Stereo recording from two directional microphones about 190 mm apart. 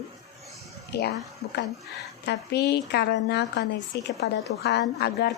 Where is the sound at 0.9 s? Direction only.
60° left (ahead or behind).